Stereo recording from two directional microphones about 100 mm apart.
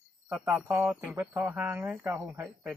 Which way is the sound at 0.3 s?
20° right (ahead or behind).